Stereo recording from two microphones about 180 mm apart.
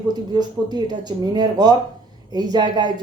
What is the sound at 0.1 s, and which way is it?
Speech, 25° right (ahead or behind).